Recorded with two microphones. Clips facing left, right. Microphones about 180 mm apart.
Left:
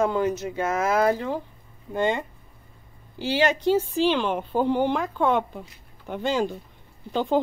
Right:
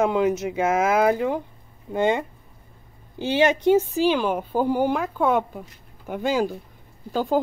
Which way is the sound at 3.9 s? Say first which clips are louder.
Right 2 dB; 10° right (ahead or behind).